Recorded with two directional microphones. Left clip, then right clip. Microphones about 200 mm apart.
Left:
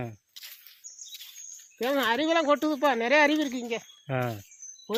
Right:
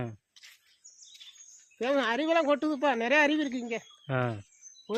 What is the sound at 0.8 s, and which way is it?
Bird vocalization, 15° right (ahead or behind).